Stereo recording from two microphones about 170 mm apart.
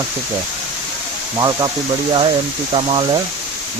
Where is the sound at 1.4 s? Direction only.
20° right (ahead or behind).